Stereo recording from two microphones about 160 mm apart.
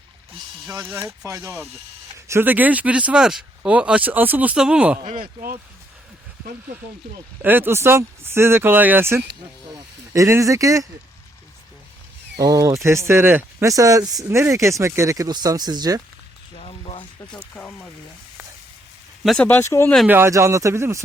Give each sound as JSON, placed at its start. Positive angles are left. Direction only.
{"t": 0.7, "sound": "speech", "side_deg": -15}
{"t": 5.0, "sound": "speech", "side_deg": -55}
{"t": 7.4, "sound": "speech", "side_deg": -10}
{"t": 12.4, "sound": "speech", "side_deg": -20}
{"t": 16.6, "sound": "a sound", "side_deg": 35}
{"t": 17.5, "sound": "speech", "side_deg": 10}
{"t": 19.2, "sound": "speech", "side_deg": 0}
{"t": 19.5, "sound": "speech", "side_deg": 15}
{"t": 20.1, "sound": "speech", "side_deg": -15}